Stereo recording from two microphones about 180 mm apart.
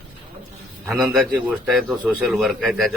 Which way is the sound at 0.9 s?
5° right (ahead or behind).